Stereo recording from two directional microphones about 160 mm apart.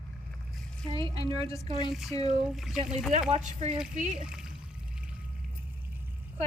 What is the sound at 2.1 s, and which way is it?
Speech, 40° right (ahead or behind).